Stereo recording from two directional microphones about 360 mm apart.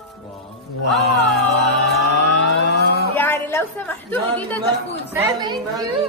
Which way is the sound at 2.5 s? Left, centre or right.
Left.